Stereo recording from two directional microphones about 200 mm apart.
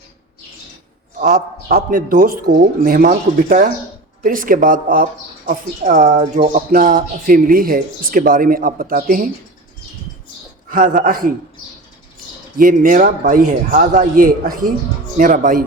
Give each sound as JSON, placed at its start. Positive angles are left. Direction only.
{"t": 1.2, "sound": "speech", "side_deg": -40}
{"t": 10.7, "sound": "speech", "side_deg": -40}
{"t": 12.5, "sound": "speech", "side_deg": -45}